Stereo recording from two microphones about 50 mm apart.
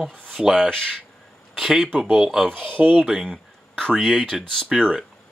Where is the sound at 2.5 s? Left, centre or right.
Right.